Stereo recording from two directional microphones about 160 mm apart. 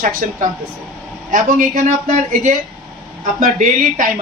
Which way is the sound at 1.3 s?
60° right (ahead or behind).